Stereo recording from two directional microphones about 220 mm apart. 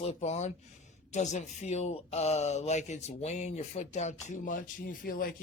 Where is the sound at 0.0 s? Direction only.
30° left (ahead or behind).